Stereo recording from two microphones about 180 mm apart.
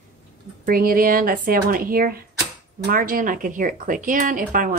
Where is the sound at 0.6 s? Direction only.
55° right (ahead or behind).